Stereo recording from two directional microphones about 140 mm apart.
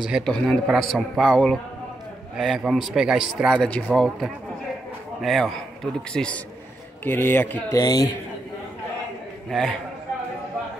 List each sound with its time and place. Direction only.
0.0 s a man's voice: centre (ahead or behind)
7.7 s speech: 25° left (ahead or behind)
9.5 s a man's voice: centre (ahead or behind)